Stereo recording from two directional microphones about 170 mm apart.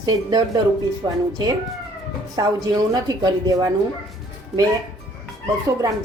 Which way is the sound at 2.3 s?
20° right (ahead or behind).